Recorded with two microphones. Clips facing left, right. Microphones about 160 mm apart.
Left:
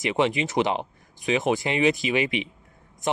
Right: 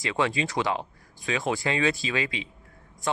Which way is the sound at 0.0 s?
20° left (ahead or behind).